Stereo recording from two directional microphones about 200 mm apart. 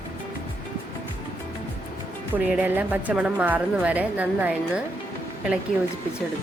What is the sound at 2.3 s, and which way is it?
A woman's voice, 5° right (ahead or behind).